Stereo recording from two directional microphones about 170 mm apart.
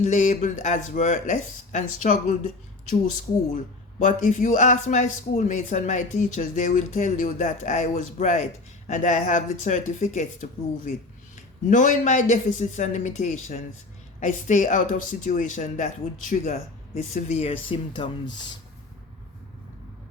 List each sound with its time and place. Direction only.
0.0 s speech: 45° left (ahead or behind)
3.5 s speech: 50° left (ahead or behind)
11.7 s speech: 50° left (ahead or behind); by 18.6 s 25° left (ahead or behind)